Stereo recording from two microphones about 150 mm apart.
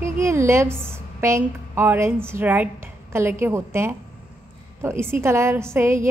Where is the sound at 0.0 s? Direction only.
20° right (ahead or behind).